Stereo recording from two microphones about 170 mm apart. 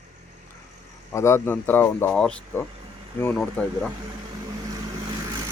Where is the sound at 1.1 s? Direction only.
15° left (ahead or behind).